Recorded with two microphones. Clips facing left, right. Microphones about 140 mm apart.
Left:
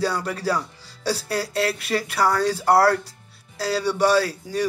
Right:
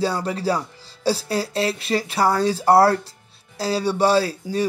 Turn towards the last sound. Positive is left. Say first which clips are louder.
# right 2 dB
turn(degrees=-25)  # may be behind; listen again after turning